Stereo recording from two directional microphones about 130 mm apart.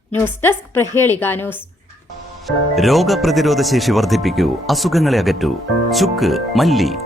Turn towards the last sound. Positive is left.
turn(degrees=0)  # may be behind; listen again after turning